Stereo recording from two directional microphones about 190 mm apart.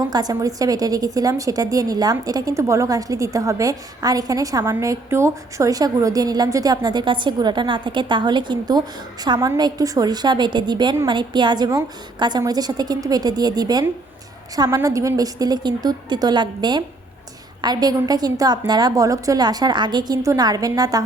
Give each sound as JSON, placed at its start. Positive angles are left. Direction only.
{"t": 0.0, "sound": "a woman's voice", "side_deg": -20}